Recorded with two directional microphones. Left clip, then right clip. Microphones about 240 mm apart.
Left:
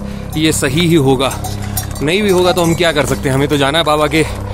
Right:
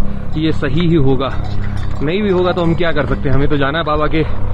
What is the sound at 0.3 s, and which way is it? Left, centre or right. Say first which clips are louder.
Speech: left 4 dB; left.